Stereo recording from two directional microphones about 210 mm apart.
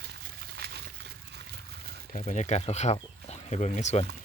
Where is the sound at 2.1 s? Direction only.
35° left (ahead or behind).